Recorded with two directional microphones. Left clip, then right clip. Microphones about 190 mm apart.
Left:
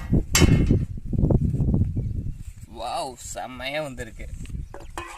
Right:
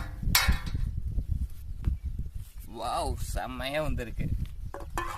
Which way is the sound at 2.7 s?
25° left (ahead or behind).